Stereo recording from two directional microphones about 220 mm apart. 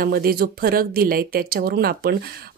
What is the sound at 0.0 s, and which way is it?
Speech, 45° right (ahead or behind).